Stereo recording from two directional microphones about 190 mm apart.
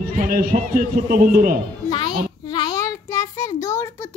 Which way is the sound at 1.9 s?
20° left (ahead or behind).